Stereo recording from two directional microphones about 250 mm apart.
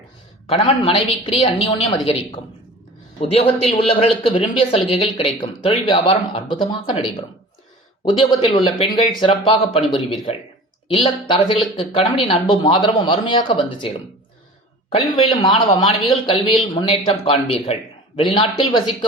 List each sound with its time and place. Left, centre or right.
0.4 s speech: left
3.2 s speech: left
14.9 s speech: centre